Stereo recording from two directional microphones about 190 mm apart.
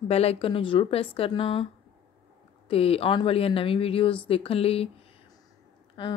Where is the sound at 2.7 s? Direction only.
30° left (ahead or behind).